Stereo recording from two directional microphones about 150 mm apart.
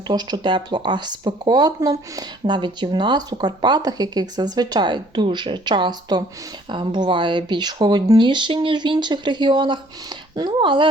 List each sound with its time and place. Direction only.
0.1 s speech: 30° right (ahead or behind)